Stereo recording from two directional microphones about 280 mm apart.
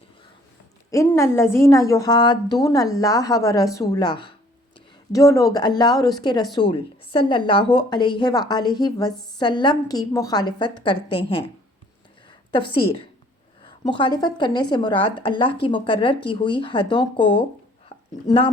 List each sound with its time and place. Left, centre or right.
0.9 s a woman's voice: centre
12.5 s a woman's voice: centre
17.8 s a sound: centre